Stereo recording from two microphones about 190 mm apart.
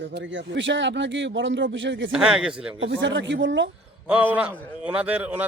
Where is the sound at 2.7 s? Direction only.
75° right (ahead or behind).